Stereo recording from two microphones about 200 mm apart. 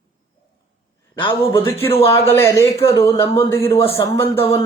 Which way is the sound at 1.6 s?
10° left (ahead or behind).